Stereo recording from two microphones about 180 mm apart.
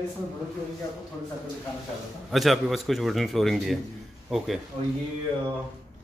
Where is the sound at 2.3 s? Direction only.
Centre (ahead or behind).